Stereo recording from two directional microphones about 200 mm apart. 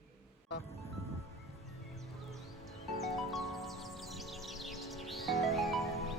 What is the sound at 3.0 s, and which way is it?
Music, centre (ahead or behind).